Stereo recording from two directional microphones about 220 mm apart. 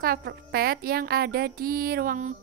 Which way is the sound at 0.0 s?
45° right (ahead or behind).